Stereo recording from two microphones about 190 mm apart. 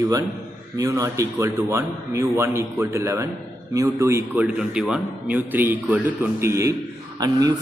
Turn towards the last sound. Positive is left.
turn(degrees=-20)  # may be behind; listen again after turning